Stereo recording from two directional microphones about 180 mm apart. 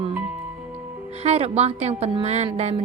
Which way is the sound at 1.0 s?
35° right (ahead or behind).